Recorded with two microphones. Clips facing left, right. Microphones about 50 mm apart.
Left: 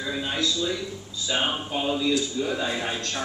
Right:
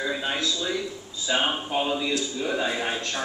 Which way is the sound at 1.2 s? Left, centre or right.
Centre.